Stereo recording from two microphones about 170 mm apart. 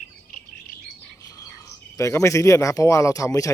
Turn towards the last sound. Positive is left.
turn(degrees=20)  # may be behind; listen again after turning